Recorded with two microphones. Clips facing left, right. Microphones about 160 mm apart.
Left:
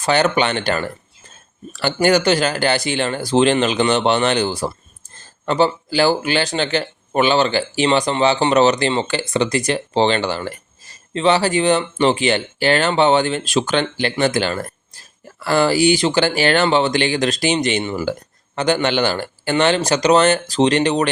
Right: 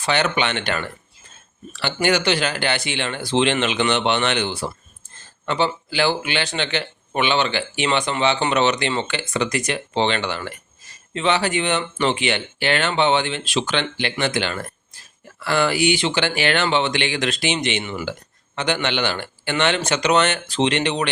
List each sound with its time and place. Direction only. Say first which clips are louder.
0.0 s speech: left 5 dB; 40° left (ahead or behind)